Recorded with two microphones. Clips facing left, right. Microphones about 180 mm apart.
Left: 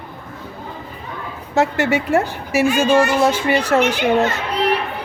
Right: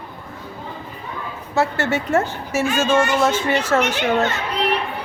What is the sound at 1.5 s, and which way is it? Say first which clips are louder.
A woman's voice: left 3 dB; 15° left (ahead or behind).